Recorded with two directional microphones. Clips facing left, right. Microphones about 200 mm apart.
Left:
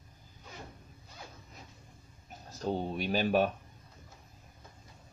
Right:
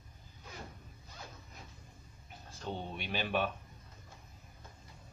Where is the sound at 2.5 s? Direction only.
40° left (ahead or behind).